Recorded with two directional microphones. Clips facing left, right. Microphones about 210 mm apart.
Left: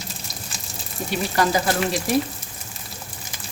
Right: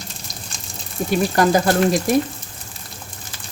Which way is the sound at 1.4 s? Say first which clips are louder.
Right 4 dB; 45° right (ahead or behind).